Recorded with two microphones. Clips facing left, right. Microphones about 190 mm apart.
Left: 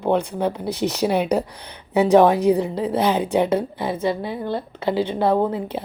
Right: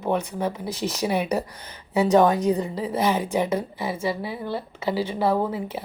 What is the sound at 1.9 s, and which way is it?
A woman's voice, 65° left (ahead or behind).